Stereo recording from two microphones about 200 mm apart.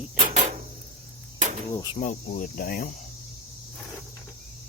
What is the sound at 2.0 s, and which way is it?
Cricket, 40° left (ahead or behind).